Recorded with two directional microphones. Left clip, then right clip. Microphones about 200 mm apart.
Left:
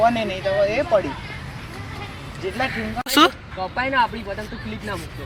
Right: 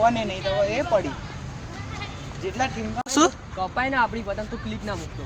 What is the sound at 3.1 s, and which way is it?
Speech, 10° right (ahead or behind).